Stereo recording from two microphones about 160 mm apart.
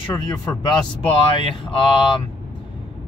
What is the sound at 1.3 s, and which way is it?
Speech, 35° left (ahead or behind).